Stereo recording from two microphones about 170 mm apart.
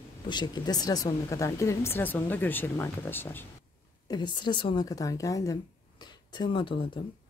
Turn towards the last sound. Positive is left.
turn(degrees=30)  # may be behind; listen again after turning